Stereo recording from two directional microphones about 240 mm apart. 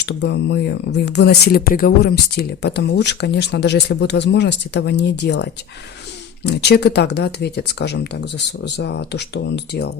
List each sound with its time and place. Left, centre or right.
0.0 s speech: left